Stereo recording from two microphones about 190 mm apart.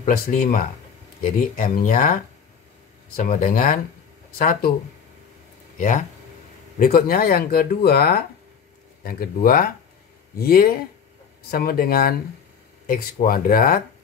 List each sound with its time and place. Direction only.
0.0 s speech: 50° left (ahead or behind)
3.2 s speech: 45° left (ahead or behind)
5.8 s speech: 45° left (ahead or behind)